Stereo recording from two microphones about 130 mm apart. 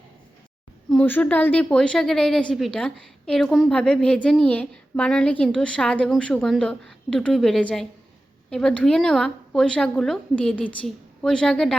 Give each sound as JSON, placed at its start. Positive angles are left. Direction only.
{"t": 0.9, "sound": "a woman's voice", "side_deg": 10}